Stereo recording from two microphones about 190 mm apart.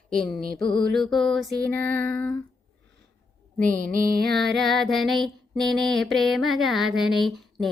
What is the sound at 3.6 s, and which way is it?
Music, 50° right (ahead or behind).